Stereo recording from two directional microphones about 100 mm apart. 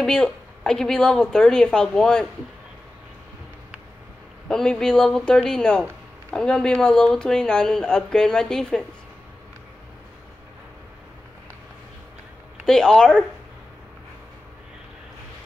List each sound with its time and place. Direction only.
0.0 s speech: 5° left (ahead or behind)
4.5 s speech: 5° left (ahead or behind)
12.6 s speech: 5° left (ahead or behind)